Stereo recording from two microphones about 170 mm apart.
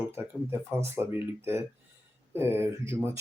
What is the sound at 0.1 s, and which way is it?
Speech, 15° right (ahead or behind).